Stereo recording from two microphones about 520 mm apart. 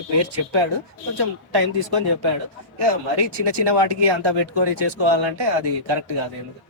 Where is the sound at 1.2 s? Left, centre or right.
Right.